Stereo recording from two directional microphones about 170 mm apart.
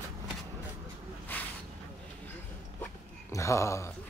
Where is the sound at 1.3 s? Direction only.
10° left (ahead or behind).